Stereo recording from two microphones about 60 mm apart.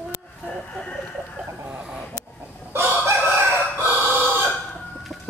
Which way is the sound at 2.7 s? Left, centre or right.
Right.